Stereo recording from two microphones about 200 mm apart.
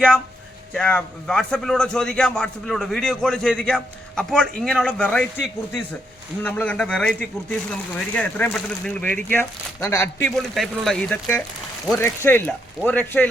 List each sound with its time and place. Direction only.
0.7 s a man's voice: 5° left (ahead or behind)
6.4 s speech: 10° left (ahead or behind)
10.2 s a man's voice: centre (ahead or behind)